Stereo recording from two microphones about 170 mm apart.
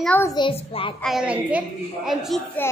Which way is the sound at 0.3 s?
30° left (ahead or behind).